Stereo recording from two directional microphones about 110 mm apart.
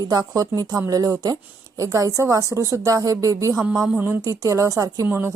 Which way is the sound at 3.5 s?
5° right (ahead or behind).